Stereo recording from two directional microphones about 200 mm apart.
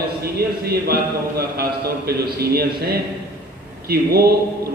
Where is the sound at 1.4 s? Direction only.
50° right (ahead or behind).